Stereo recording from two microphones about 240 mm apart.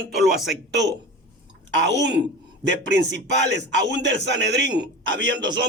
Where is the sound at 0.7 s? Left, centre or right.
Right.